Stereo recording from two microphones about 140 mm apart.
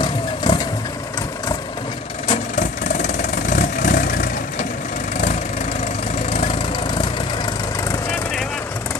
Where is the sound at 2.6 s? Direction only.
60° left (ahead or behind).